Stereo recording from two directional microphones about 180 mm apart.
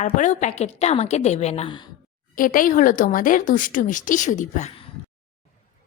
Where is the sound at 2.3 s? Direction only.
50° left (ahead or behind).